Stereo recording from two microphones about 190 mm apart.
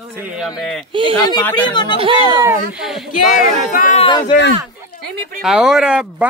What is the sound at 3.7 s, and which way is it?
Speech, 45° left (ahead or behind).